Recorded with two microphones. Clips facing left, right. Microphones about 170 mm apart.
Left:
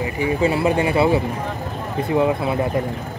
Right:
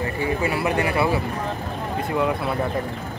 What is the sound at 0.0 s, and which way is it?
Speech, 20° left (ahead or behind).